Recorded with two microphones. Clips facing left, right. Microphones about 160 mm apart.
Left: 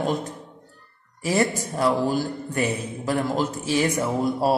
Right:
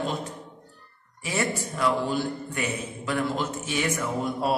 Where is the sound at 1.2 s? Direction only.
35° left (ahead or behind).